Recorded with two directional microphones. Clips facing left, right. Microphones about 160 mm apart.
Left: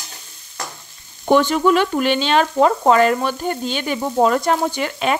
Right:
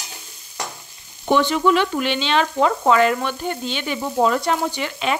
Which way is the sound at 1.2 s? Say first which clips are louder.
Left 3 dB; 45° left (ahead or behind).